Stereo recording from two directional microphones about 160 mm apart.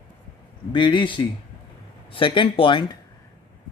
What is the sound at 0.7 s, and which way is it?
Speech, 30° left (ahead or behind).